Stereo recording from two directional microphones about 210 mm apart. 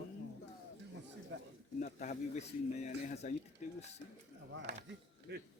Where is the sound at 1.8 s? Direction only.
35° left (ahead or behind).